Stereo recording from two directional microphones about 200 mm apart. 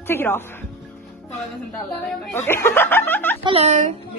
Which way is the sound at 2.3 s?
10° left (ahead or behind).